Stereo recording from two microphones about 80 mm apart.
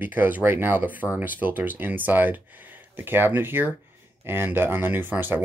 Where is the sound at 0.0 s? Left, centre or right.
Right.